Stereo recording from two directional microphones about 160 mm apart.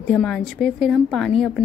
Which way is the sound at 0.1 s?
5° left (ahead or behind).